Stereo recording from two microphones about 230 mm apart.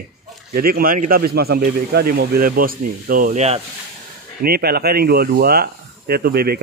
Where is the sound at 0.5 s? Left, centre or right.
Right.